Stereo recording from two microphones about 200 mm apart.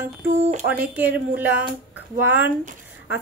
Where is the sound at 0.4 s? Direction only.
35° right (ahead or behind).